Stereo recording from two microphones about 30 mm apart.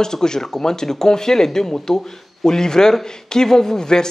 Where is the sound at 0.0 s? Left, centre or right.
Left.